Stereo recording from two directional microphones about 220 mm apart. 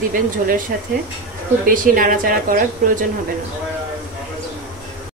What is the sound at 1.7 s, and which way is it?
A woman's voice, 40° right (ahead or behind).